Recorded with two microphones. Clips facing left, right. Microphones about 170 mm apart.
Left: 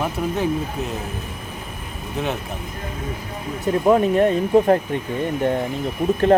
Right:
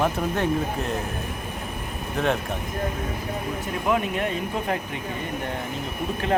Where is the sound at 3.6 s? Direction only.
40° left (ahead or behind).